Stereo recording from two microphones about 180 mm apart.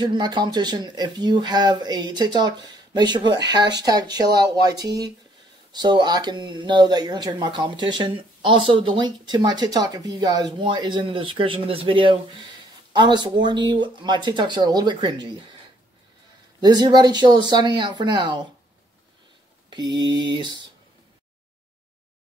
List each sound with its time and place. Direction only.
0.0 s speech: 25° right (ahead or behind)
16.6 s speech: 25° right (ahead or behind)
19.7 s speech: 25° right (ahead or behind)